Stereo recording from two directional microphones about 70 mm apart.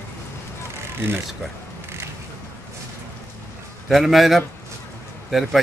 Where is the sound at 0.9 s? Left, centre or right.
Right.